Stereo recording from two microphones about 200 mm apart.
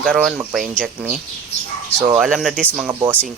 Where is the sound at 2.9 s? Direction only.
20° right (ahead or behind).